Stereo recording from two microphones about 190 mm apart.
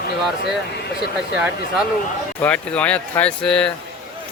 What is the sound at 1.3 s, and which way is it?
Speech, 5° right (ahead or behind).